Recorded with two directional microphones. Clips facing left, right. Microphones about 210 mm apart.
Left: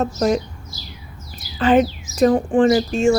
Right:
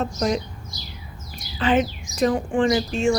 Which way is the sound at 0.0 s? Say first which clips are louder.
Left 5 dB; 45° left (ahead or behind).